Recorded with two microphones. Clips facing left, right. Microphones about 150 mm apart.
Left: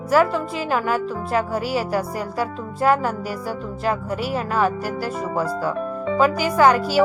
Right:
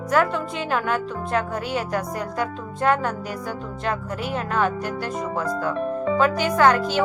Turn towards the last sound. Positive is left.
turn(degrees=10)  # may be behind; listen again after turning